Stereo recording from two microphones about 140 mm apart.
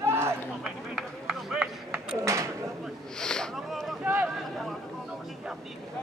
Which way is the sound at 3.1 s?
5° left (ahead or behind).